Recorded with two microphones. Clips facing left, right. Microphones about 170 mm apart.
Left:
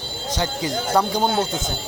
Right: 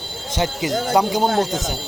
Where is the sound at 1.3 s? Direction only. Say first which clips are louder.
Right 3 dB; 40° right (ahead or behind).